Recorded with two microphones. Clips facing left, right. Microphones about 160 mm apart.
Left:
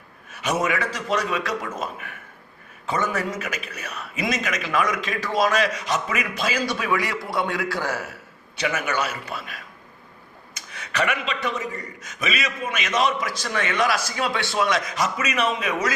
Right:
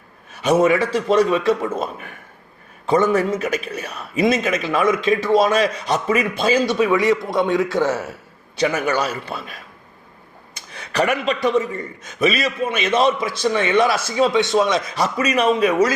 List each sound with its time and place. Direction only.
0.3 s a man's voice: 30° right (ahead or behind)